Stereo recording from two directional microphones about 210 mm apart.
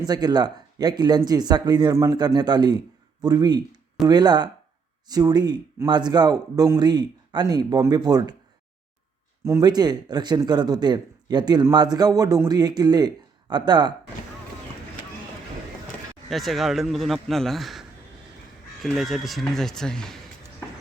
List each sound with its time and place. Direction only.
0.0 s speech: 20° right (ahead or behind)
9.4 s speech: 15° right (ahead or behind)
16.3 s a man's voice: centre (ahead or behind)